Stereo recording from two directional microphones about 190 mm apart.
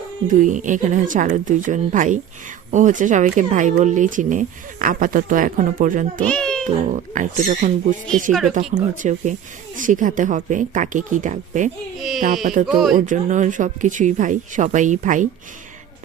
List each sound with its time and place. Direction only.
0.3 s speech: 40° right (ahead or behind)
6.2 s a child's voice: 5° left (ahead or behind)
6.9 s speech: 40° right (ahead or behind)
8.3 s speech: centre (ahead or behind)
8.7 s speech: 40° right (ahead or behind)
12.6 s speech: centre (ahead or behind)
13.0 s speech: 40° right (ahead or behind)